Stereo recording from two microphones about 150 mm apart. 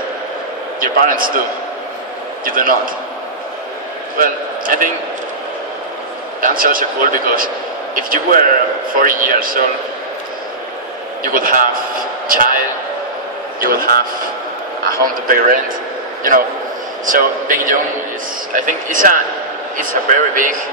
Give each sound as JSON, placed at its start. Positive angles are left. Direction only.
{"t": 0.7, "sound": "a man's voice", "side_deg": -65}
{"t": 2.4, "sound": "a man's voice", "side_deg": -70}
{"t": 4.2, "sound": "speech", "side_deg": -65}
{"t": 6.4, "sound": "a man's voice", "side_deg": -65}
{"t": 11.3, "sound": "a man's voice", "side_deg": -65}
{"t": 13.6, "sound": "a man's voice", "side_deg": -75}
{"t": 17.0, "sound": "speech", "side_deg": -65}